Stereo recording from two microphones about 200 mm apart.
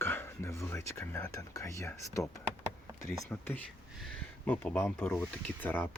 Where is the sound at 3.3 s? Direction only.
10° left (ahead or behind).